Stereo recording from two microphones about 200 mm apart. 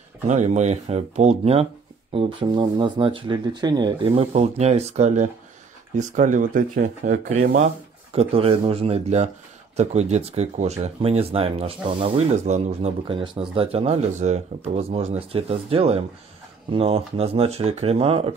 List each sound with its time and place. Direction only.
0.3 s speech: 35° right (ahead or behind)